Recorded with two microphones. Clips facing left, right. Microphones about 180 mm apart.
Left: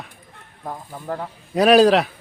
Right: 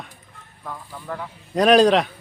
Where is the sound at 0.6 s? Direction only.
40° left (ahead or behind).